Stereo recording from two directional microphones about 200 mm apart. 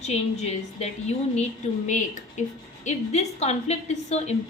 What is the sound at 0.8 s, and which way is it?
A woman's voice, 35° left (ahead or behind).